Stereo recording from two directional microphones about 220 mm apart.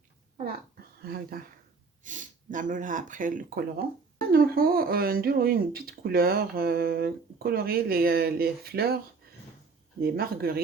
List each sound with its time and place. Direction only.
1.0 s speech: 45° right (ahead or behind)
10.0 s speech: 45° right (ahead or behind)